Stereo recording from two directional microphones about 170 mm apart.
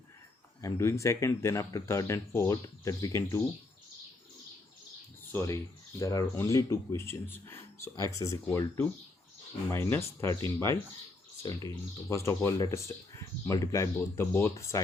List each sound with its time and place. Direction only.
0.6 s speech: 15° left (ahead or behind)
5.3 s speech: 15° left (ahead or behind)